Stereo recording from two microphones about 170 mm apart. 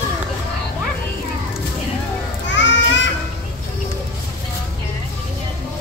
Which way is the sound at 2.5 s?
90° left.